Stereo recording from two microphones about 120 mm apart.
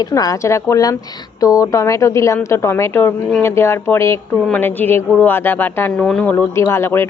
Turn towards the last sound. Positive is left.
turn(degrees=20)  # may be behind; listen again after turning